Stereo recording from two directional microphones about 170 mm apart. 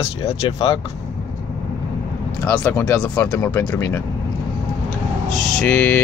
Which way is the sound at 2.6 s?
15° left (ahead or behind).